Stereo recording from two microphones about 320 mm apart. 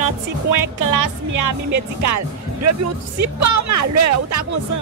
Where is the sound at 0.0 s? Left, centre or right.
Right.